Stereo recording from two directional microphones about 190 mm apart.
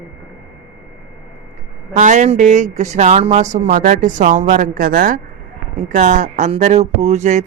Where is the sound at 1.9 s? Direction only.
40° right (ahead or behind).